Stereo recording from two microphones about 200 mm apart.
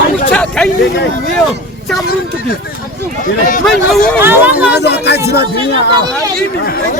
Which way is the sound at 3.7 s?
Centre (ahead or behind).